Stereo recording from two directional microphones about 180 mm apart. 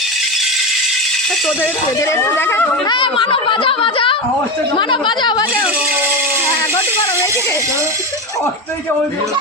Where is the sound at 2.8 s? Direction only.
25° left (ahead or behind).